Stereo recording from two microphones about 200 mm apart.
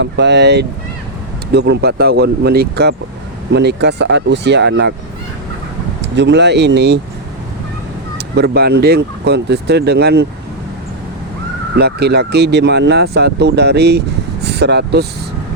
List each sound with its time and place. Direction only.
0.0 s speech: 60° right (ahead or behind)
6.0 s speech: 60° right (ahead or behind)
8.4 s speech: 55° right (ahead or behind)
11.8 s speech: 55° right (ahead or behind)